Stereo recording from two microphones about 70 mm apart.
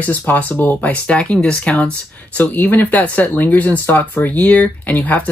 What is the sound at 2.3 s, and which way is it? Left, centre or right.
Speech, left.